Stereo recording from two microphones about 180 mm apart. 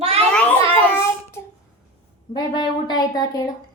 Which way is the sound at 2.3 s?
25° left (ahead or behind).